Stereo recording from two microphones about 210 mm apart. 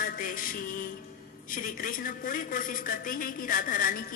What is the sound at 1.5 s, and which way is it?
A woman's voice, 40° left (ahead or behind).